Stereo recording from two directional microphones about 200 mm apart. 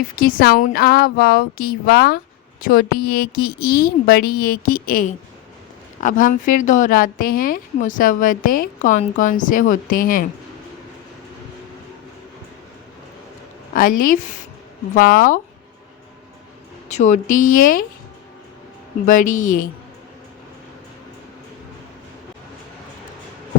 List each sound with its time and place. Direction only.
0.2 s a woman's voice: 45° left (ahead or behind)
13.7 s speech: 45° left (ahead or behind)
16.9 s a woman's voice: 35° left (ahead or behind)
19.0 s a woman's voice: 40° left (ahead or behind)